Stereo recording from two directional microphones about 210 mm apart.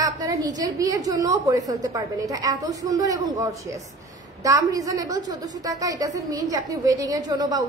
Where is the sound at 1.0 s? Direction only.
20° right (ahead or behind).